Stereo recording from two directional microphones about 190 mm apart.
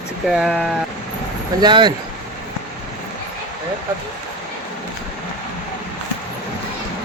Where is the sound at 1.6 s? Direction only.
25° right (ahead or behind).